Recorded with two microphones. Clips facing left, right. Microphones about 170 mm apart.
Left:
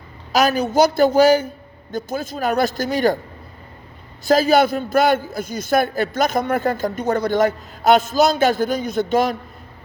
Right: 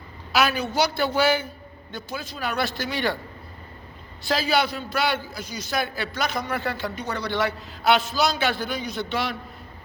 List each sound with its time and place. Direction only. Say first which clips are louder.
0.3 s a man's voice: left 7 dB; 40° left (ahead or behind)
4.3 s a man's voice: left 9 dB; 45° left (ahead or behind)